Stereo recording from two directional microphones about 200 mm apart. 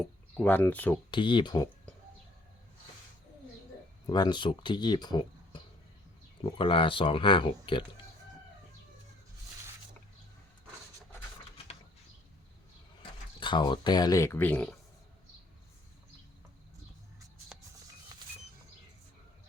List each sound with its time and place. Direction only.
0.0 s speech: 5° left (ahead or behind)
1.1 s speech: 25° left (ahead or behind)
4.0 s speech: 20° left (ahead or behind)
13.0 s speech: 25° left (ahead or behind); by 14.8 s 5° left (ahead or behind)